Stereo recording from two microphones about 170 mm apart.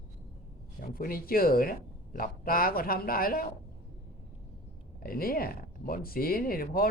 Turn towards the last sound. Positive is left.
turn(degrees=60)  # may be behind; listen again after turning